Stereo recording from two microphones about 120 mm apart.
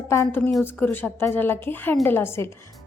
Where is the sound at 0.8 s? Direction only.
15° left (ahead or behind).